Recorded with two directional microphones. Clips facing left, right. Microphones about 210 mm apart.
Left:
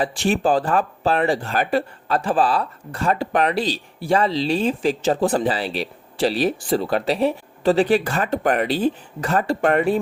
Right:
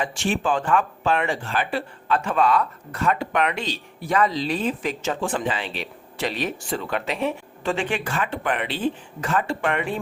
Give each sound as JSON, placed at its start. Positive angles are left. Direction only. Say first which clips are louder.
{"t": 0.0, "sound": "speech", "louder": "left 5 dB", "side_deg": 35}